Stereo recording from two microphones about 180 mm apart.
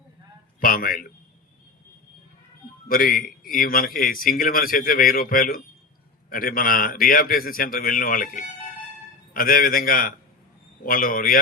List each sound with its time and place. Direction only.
0.6 s a man's voice: 50° left (ahead or behind)
2.9 s a man's voice: 50° left (ahead or behind)